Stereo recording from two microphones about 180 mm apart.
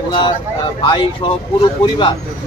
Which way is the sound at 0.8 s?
25° left (ahead or behind).